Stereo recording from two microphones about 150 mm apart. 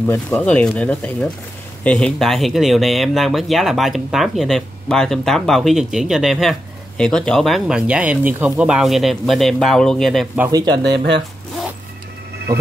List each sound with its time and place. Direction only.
0.0 s speech: 10° left (ahead or behind)
10.5 s speech: 30° right (ahead or behind)